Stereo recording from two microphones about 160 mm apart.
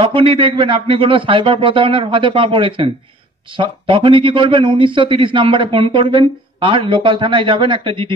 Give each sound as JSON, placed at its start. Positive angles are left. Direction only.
{"t": 0.0, "sound": "a man's voice", "side_deg": -35}